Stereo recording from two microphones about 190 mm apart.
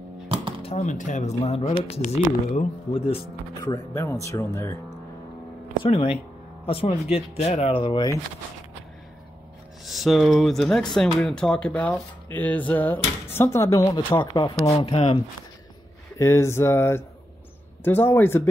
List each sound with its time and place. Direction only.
0.6 s speech: 35° left (ahead or behind)
3.6 s speech: 15° left (ahead or behind)
6.6 s speech: 30° left (ahead or behind)
9.8 s speech: centre (ahead or behind); by 14.6 s 20° left (ahead or behind)
14.7 s speech: 30° left (ahead or behind)
16.2 s speech: 15° left (ahead or behind)